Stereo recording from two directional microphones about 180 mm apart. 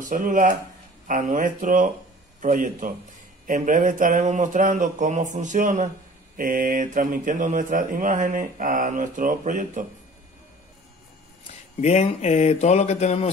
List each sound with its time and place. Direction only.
0.0 s speech: 50° right (ahead or behind)
11.8 s speech: 40° left (ahead or behind)